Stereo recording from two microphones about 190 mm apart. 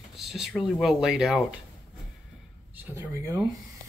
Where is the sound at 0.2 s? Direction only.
Centre (ahead or behind).